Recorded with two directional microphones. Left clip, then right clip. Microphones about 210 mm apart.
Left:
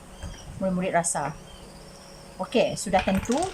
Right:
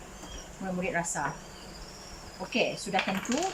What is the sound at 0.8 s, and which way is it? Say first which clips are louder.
Speech: left 5 dB; 30° left (ahead or behind).